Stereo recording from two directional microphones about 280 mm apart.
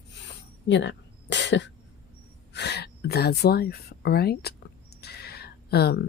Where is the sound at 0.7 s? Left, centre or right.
Left.